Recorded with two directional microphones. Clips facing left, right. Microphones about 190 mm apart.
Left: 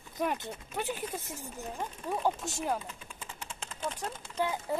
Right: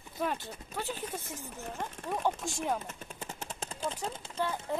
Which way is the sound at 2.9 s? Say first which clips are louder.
Right 3 dB; 45° right (ahead or behind).